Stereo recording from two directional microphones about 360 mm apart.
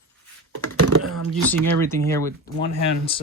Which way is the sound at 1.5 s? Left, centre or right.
Centre.